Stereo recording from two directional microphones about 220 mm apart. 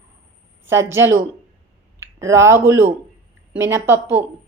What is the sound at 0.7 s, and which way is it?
A woman's voice, 10° right (ahead or behind).